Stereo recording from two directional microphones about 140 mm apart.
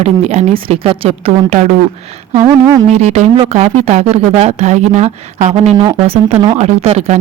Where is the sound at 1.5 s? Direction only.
55° right (ahead or behind).